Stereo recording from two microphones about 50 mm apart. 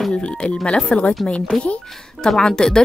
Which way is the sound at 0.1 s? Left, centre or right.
Left.